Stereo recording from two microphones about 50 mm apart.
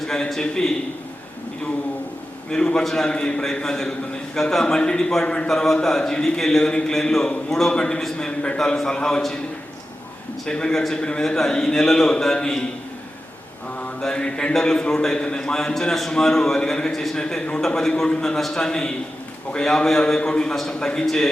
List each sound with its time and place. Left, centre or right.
0.0 s a man's voice: centre
2.5 s a man's voice: centre
4.6 s a man's voice: centre
5.5 s a man's voice: centre
10.4 s a man's voice: centre
14.0 s a man's voice: centre